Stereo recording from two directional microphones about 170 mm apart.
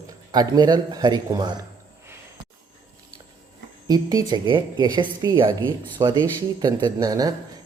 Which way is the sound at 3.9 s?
20° right (ahead or behind).